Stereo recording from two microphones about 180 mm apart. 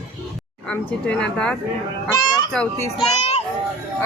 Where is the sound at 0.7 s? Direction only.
5° left (ahead or behind).